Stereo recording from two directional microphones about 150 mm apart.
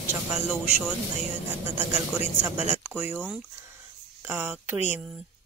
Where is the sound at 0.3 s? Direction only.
5° right (ahead or behind).